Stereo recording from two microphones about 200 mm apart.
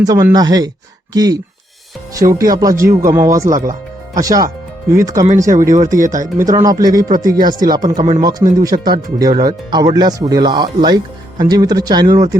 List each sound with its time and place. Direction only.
0.0 s speech: 20° right (ahead or behind)
4.1 s music: 15° right (ahead or behind)
5.0 s speech: 15° right (ahead or behind)
7.9 s speech: 30° right (ahead or behind)
8.2 s speech: 20° right (ahead or behind)